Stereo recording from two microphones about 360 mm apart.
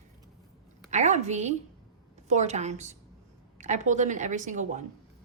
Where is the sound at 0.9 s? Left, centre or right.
Centre.